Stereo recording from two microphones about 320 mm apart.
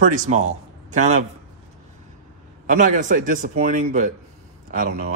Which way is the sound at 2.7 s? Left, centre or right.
Right.